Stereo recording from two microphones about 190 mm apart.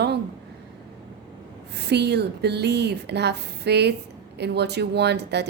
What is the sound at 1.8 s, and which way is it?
A woman's voice, 60° right (ahead or behind).